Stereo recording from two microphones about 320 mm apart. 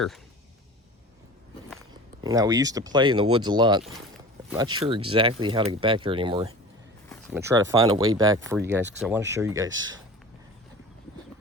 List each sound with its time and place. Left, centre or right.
2.2 s speech: centre